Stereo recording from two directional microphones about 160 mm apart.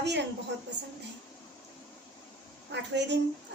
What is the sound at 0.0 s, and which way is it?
Speech, 90° right.